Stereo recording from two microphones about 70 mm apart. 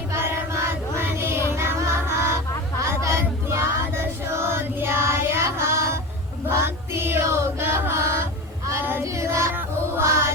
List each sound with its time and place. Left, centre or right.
0.1 s child singing: right
2.8 s female singing: right
6.5 s chant: right
9.0 s female singing: right
9.6 s music: right